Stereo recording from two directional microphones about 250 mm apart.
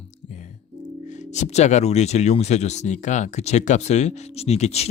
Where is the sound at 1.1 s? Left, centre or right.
Left.